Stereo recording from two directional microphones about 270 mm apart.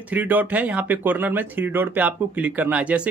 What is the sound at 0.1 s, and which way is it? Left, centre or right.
Speech, centre.